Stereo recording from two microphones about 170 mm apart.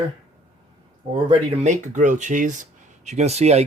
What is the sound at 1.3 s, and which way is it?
Speech, 45° right (ahead or behind).